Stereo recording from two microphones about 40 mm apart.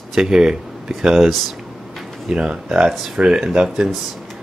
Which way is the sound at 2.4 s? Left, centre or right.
Right.